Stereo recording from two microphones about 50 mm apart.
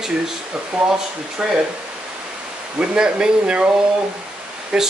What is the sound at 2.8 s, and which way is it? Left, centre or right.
Speech, centre.